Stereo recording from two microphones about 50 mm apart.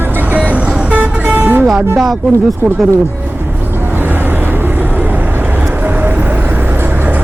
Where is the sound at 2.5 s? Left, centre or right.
Right.